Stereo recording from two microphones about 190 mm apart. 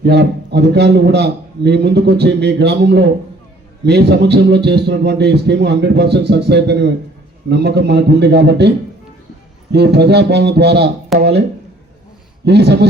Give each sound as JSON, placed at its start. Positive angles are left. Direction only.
{"t": 0.0, "sound": "a man's voice", "side_deg": -60}
{"t": 9.7, "sound": "a man's voice", "side_deg": -60}
{"t": 11.1, "sound": "speech", "side_deg": 0}
{"t": 12.5, "sound": "a man's voice", "side_deg": -60}